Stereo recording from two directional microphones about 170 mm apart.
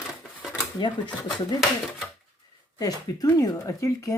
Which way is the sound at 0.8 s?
25° left (ahead or behind).